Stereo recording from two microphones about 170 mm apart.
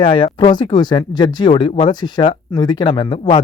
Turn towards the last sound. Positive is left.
turn(degrees=30)  # may be behind; listen again after turning